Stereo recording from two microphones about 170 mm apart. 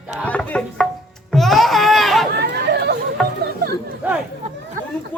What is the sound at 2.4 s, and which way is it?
Chatter, 70° right (ahead or behind).